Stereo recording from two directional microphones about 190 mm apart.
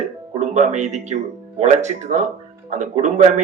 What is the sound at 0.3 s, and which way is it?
A man's voice, 40° right (ahead or behind).